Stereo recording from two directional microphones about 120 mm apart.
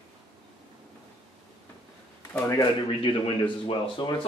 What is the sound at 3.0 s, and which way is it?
A man's voice, 45° left (ahead or behind).